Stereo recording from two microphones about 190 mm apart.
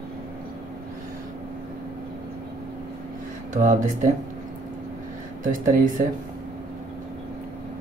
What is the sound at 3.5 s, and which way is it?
Speech, 40° right (ahead or behind).